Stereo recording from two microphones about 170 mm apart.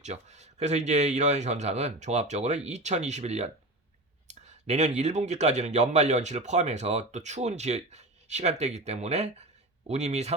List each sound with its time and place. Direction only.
0.0 s speech: 40° right (ahead or behind)